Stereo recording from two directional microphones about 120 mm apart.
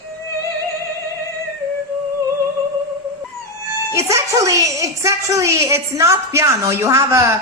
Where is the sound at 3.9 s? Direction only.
25° right (ahead or behind).